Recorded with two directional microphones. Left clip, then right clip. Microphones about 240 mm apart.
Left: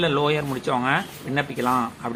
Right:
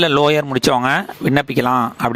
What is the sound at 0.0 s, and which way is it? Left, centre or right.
Speech, right.